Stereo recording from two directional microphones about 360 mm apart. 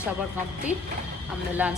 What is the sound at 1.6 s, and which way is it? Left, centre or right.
Speech, centre.